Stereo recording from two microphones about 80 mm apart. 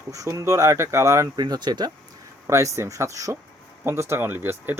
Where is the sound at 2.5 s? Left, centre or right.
Right.